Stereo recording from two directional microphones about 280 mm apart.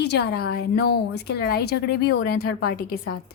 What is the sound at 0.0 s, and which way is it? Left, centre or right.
A woman's voice, left.